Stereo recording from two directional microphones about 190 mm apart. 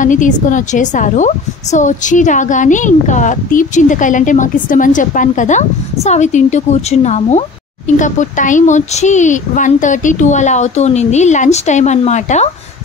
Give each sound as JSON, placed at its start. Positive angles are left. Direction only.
{"t": 0.0, "sound": "a woman's voice", "side_deg": 40}